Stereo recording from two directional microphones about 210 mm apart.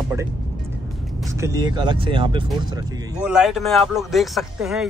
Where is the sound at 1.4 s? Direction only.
15° right (ahead or behind).